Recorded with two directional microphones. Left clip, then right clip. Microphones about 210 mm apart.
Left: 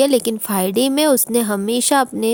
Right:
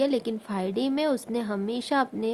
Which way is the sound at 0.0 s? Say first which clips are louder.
Left 10 dB; 50° left (ahead or behind).